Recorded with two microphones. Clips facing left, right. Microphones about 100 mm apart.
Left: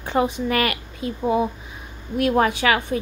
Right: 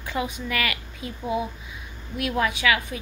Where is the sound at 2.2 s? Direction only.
40° left (ahead or behind).